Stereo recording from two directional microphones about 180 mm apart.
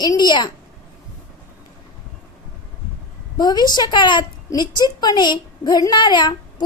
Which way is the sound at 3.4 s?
20° left (ahead or behind).